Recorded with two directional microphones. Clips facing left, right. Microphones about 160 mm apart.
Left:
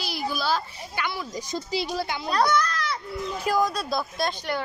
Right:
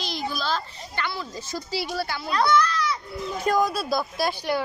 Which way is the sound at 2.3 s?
45° left (ahead or behind).